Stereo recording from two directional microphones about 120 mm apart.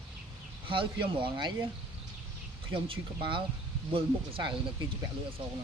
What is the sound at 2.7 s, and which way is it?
Speech, 45° right (ahead or behind).